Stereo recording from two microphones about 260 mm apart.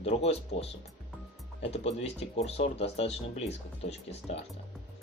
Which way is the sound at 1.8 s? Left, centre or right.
Left.